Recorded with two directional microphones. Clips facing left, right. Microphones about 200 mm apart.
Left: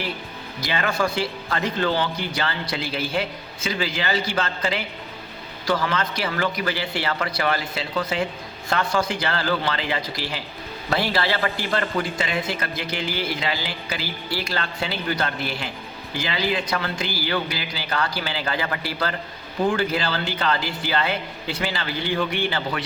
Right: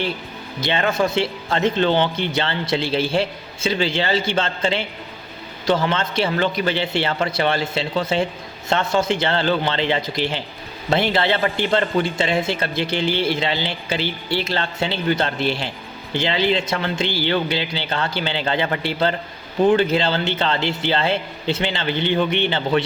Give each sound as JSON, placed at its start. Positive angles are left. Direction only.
{"t": 0.6, "sound": "a man's voice", "side_deg": -25}